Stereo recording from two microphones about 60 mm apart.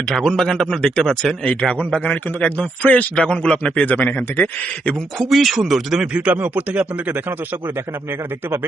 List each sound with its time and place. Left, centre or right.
0.1 s speech: centre
1.5 s a man's voice: centre
5.1 s speech: centre
6.0 s speech: right